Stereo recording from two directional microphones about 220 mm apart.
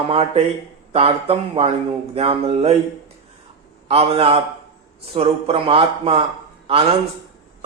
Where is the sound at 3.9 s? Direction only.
25° right (ahead or behind).